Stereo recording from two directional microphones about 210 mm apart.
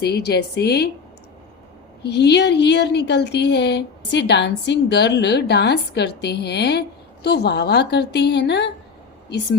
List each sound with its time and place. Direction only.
0.0 s speech: 50° left (ahead or behind)
2.0 s speech: 55° left (ahead or behind)